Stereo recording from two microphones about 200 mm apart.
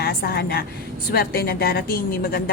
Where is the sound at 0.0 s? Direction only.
50° left (ahead or behind).